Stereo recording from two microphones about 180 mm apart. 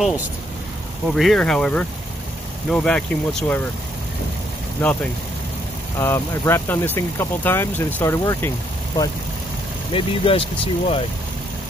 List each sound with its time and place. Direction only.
1.1 s speech: centre (ahead or behind)
5.9 s speech: 15° left (ahead or behind)
9.9 s speech: 30° left (ahead or behind)